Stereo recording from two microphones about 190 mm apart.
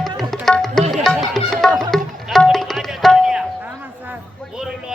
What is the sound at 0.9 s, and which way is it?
Music, centre (ahead or behind).